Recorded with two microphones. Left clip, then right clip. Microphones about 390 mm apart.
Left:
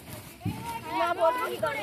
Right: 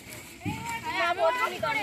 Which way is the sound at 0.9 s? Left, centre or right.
Left.